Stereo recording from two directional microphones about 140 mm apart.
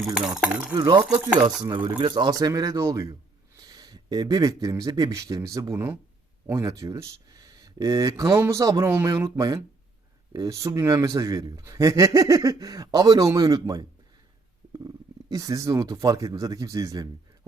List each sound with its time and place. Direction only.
0.0 s speech: centre (ahead or behind)
0.8 s a man's voice: 30° right (ahead or behind)
1.6 s cutlery: 35° right (ahead or behind)
2.0 s a man's voice: 35° right (ahead or behind)